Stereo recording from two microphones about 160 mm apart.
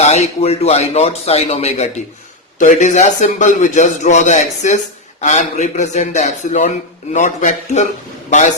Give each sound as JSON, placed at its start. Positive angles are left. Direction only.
{"t": 0.0, "sound": "a man's voice", "side_deg": 45}